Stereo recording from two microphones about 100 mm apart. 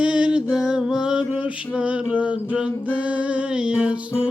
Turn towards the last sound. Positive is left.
turn(degrees=-10)  # may be behind; listen again after turning